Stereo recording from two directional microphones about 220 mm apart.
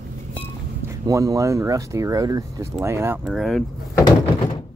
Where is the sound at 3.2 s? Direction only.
Centre (ahead or behind).